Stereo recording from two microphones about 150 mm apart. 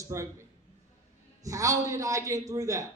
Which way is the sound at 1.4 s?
20° right (ahead or behind).